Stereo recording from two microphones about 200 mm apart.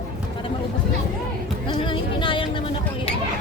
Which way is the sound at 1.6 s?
25° left (ahead or behind).